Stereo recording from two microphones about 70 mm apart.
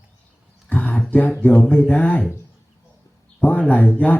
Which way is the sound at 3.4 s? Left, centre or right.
Centre.